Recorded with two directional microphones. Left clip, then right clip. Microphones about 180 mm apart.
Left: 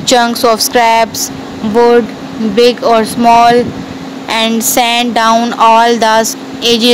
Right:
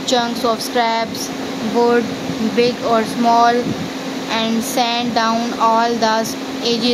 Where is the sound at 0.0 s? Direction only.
45° left (ahead or behind).